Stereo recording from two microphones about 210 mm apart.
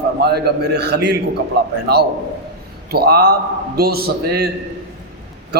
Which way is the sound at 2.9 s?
50° right (ahead or behind).